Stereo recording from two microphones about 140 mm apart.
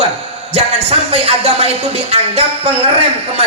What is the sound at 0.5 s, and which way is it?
A man's voice, 45° right (ahead or behind).